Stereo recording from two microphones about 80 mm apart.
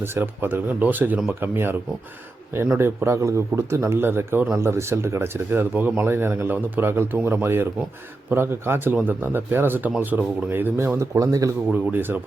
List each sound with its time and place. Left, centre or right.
0.0 s speech: right
2.7 s a man's voice: right
11.7 s speech: right